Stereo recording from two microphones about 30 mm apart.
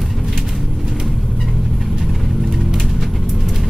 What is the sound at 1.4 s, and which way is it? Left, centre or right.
Vehicle, centre.